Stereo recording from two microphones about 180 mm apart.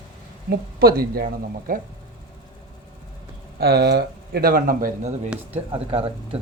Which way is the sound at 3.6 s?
65° right (ahead or behind).